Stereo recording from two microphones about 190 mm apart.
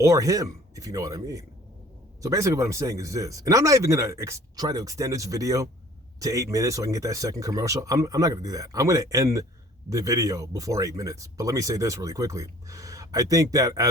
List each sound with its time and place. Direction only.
0.0 s speech: 15° right (ahead or behind)